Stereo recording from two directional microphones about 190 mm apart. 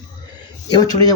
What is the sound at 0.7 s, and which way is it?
Speech, 20° left (ahead or behind).